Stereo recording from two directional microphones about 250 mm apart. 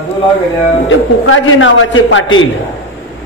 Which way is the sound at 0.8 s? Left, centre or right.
Left.